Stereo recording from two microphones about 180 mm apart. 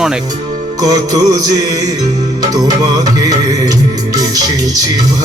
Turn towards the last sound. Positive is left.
turn(degrees=-20)  # may be behind; listen again after turning